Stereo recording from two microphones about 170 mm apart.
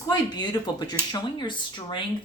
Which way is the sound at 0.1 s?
25° left (ahead or behind).